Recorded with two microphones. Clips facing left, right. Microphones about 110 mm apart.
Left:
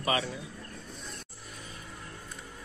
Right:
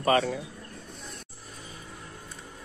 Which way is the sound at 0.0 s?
45° right (ahead or behind).